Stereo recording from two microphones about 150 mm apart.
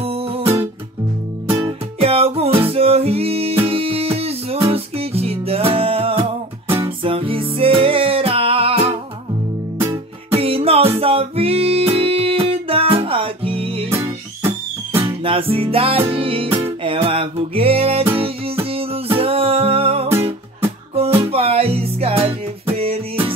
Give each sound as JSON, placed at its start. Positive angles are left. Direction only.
{"t": 0.0, "sound": "music", "side_deg": -40}
{"t": 2.0, "sound": "music", "side_deg": -40}
{"t": 10.3, "sound": "music", "side_deg": -40}
{"t": 13.8, "sound": "music", "side_deg": -15}
{"t": 15.2, "sound": "music", "side_deg": -35}